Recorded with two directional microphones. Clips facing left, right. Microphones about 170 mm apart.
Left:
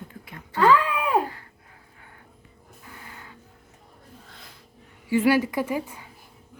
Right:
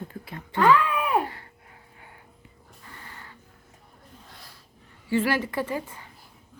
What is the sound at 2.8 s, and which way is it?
Music, 5° left (ahead or behind).